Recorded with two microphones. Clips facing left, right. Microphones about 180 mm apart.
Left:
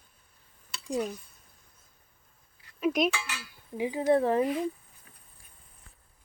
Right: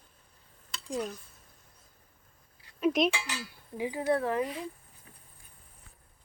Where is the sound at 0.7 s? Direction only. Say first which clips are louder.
Left 3 dB; 15° left (ahead or behind).